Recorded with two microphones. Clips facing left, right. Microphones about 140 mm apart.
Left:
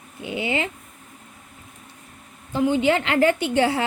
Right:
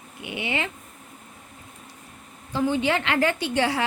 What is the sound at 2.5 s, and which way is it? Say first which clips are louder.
A woman's voice: left 4 dB; 25° left (ahead or behind).